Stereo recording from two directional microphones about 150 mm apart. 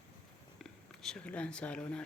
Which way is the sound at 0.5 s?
5° left (ahead or behind).